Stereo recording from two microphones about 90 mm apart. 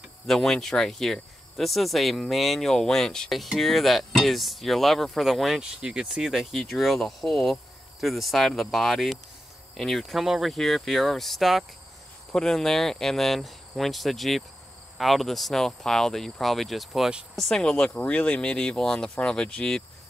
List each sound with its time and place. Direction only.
0.3 s speech: 5° left (ahead or behind)